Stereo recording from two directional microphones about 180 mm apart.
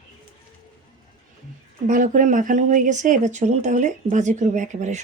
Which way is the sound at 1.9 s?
45° right (ahead or behind).